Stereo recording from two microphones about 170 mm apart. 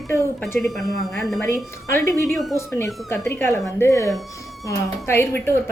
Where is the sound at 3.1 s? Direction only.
15° left (ahead or behind).